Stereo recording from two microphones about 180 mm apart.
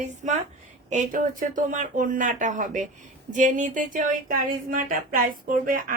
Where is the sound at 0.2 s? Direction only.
45° right (ahead or behind).